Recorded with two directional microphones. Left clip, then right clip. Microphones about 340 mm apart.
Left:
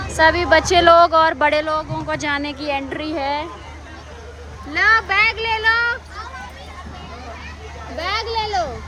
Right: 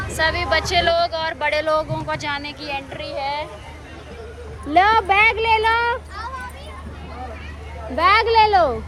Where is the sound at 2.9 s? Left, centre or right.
Left.